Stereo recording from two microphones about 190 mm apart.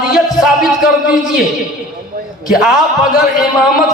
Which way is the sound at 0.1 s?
Centre (ahead or behind).